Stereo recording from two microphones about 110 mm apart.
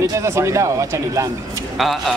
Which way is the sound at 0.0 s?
30° right (ahead or behind).